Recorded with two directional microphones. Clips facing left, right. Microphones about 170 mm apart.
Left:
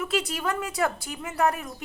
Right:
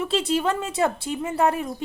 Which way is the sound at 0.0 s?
30° right (ahead or behind).